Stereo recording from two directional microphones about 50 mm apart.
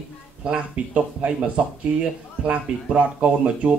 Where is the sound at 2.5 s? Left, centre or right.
Right.